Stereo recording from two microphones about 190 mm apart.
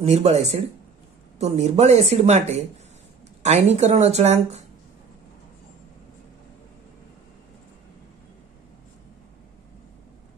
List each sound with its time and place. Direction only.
0.0 s speech: 35° right (ahead or behind)
1.4 s speech: 35° right (ahead or behind)